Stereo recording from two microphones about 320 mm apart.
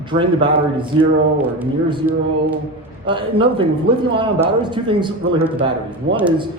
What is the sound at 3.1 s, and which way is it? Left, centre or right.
A man's voice, centre.